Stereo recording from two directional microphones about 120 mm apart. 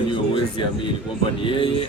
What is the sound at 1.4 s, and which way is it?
Speech, 45° left (ahead or behind).